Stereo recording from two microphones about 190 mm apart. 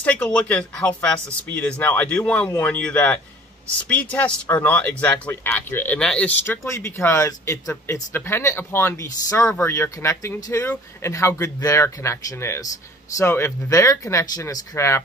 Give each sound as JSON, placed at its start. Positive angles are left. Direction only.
{"t": 0.0, "sound": "speech", "side_deg": 5}